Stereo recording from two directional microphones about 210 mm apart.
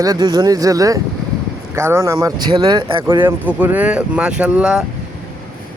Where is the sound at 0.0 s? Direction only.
20° right (ahead or behind).